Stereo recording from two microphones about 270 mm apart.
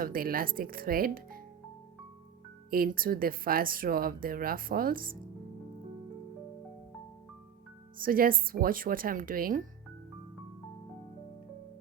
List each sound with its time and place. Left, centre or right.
0.0 s speech: right
2.6 s speech: right
7.9 s speech: right